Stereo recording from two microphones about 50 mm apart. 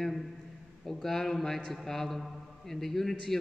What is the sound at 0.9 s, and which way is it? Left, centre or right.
A man's voice, centre.